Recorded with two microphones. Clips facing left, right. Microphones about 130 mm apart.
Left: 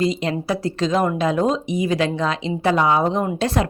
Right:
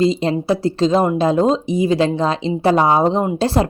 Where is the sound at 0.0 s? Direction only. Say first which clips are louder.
Right 5 dB; 30° right (ahead or behind).